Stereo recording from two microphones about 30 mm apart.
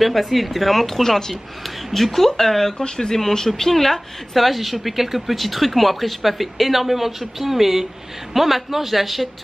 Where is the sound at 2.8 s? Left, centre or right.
Left.